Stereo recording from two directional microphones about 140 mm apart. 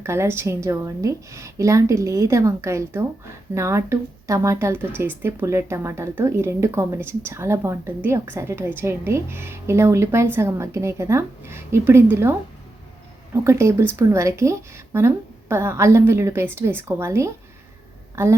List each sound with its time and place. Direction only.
0.0 s a woman's voice: 20° right (ahead or behind)